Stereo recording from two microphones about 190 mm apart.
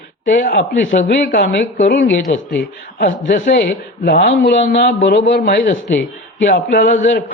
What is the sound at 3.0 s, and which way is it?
A man's voice, 45° left (ahead or behind).